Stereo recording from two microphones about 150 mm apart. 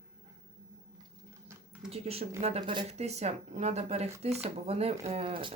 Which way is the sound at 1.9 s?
40° right (ahead or behind).